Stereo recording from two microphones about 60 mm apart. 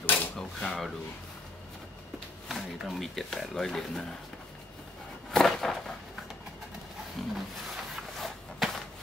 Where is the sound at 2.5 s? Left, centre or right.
Centre.